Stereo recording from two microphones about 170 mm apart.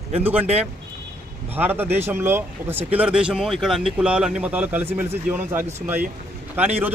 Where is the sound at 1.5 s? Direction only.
10° right (ahead or behind).